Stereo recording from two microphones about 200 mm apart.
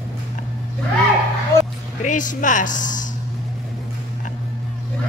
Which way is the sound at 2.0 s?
40° left (ahead or behind).